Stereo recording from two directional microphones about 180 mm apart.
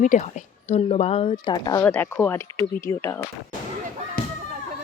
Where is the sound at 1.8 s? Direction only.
10° left (ahead or behind).